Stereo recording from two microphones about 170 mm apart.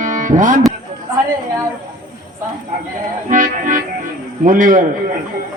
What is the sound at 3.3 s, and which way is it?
Music, 50° right (ahead or behind).